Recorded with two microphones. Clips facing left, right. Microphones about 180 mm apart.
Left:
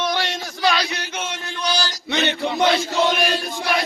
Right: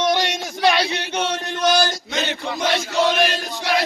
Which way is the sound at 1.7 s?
55° right (ahead or behind).